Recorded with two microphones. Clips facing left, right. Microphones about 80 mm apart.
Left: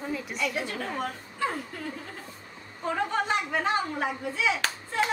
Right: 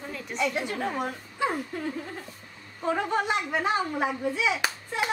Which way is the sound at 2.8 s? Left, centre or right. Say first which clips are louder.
Right 2 dB; centre.